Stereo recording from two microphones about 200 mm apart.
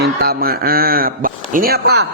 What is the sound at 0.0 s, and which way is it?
A man's voice, 50° right (ahead or behind).